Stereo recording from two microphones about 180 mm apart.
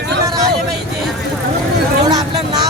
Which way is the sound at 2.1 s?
20° right (ahead or behind).